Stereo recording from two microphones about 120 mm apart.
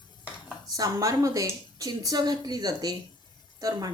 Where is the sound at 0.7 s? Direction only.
30° right (ahead or behind).